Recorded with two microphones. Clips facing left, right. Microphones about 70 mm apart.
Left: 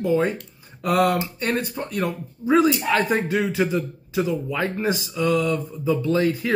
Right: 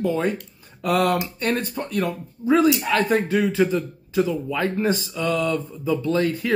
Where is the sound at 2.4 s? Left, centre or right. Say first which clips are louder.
Even; centre.